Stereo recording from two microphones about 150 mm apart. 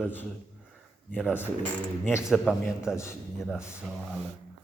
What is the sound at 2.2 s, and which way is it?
A man's voice, centre (ahead or behind).